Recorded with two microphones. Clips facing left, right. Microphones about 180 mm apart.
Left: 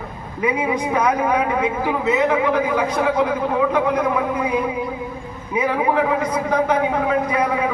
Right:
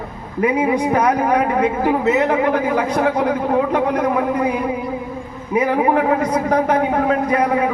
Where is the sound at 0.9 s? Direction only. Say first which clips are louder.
Left 1 dB; 45° right (ahead or behind).